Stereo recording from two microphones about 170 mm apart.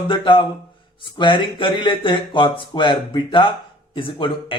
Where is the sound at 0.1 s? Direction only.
30° left (ahead or behind).